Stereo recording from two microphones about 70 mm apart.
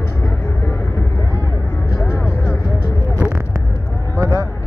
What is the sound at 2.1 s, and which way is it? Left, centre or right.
Vehicle, left.